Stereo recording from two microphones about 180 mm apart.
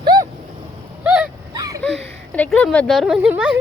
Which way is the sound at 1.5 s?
20° right (ahead or behind).